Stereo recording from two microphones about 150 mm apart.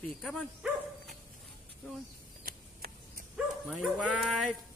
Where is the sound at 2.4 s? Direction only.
70° right (ahead or behind).